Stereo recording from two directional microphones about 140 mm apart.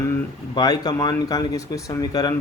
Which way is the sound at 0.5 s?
30° left (ahead or behind).